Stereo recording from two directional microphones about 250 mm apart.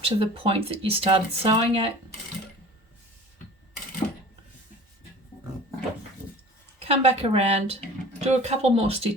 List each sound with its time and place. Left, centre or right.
0.0 s speech: right
6.7 s speech: right